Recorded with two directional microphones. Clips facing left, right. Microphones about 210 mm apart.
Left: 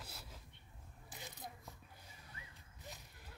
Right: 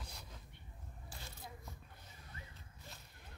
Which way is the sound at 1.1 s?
15° left (ahead or behind).